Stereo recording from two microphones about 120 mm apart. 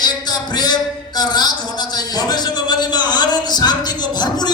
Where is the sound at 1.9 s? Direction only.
35° left (ahead or behind).